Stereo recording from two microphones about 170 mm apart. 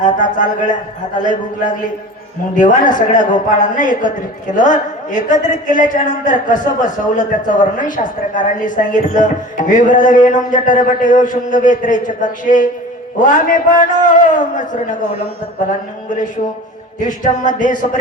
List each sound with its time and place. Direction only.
0.0 s a woman's voice: 50° left (ahead or behind)